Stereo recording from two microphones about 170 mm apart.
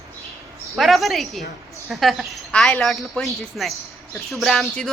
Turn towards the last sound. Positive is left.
turn(degrees=0)  # may be behind; listen again after turning